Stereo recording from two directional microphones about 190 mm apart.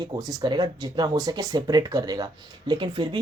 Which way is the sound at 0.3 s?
20° right (ahead or behind).